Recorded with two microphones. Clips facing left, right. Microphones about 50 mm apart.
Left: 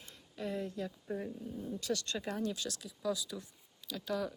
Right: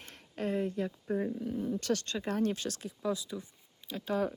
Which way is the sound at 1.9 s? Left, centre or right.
Right.